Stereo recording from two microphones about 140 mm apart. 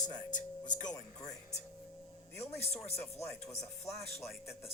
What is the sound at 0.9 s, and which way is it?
Music, 25° left (ahead or behind).